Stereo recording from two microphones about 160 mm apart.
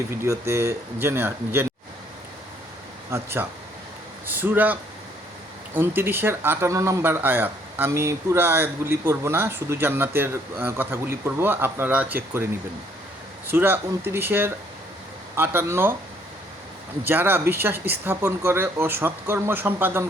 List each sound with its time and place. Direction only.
0.3 s speech: 15° right (ahead or behind)
3.1 s speech: 15° right (ahead or behind)
13.5 s speech: 15° right (ahead or behind)
17.0 s speech: 15° right (ahead or behind)